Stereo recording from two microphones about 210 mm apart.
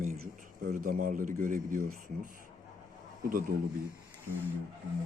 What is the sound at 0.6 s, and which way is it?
Speech, 40° right (ahead or behind).